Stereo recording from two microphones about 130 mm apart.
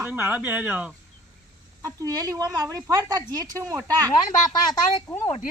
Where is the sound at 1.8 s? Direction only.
30° right (ahead or behind).